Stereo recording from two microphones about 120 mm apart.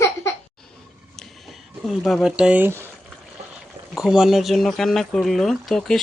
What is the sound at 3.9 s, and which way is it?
Speech, 5° right (ahead or behind).